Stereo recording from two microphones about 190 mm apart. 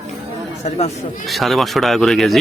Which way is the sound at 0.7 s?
35° left (ahead or behind).